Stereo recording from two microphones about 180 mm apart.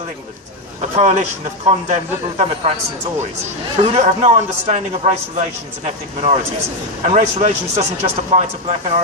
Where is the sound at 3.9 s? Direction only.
40° right (ahead or behind).